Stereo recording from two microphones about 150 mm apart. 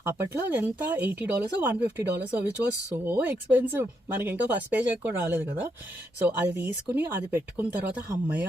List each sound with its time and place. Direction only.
0.0 s speech: 15° right (ahead or behind)